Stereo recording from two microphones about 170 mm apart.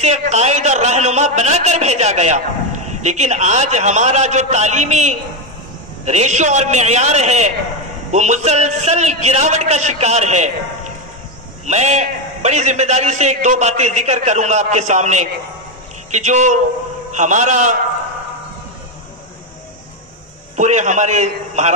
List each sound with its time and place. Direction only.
0.0 s a man's voice: 40° right (ahead or behind)
20.5 s a man's voice: 45° right (ahead or behind)